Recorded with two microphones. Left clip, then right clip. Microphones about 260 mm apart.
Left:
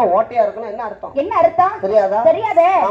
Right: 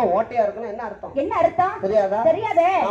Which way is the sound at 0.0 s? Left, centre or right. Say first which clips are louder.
Left 5 dB; left.